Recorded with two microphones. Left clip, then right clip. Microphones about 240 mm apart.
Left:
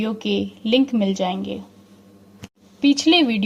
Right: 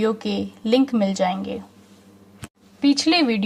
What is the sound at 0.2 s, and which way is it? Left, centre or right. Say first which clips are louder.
A woman's voice: left 3 dB; right.